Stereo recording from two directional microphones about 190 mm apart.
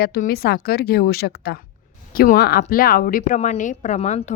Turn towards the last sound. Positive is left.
turn(degrees=35)  # may be behind; listen again after turning